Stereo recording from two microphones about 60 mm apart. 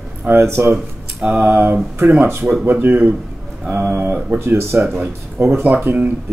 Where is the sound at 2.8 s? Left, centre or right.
Right.